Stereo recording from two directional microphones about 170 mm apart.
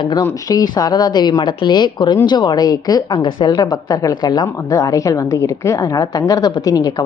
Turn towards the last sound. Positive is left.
turn(degrees=20)  # may be behind; listen again after turning